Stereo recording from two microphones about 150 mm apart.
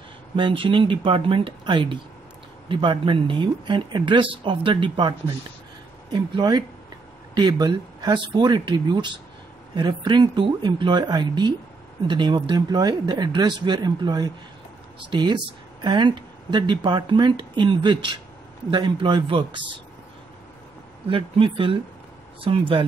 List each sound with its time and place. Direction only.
0.4 s speech: 35° right (ahead or behind)
21.1 s speech: 35° right (ahead or behind)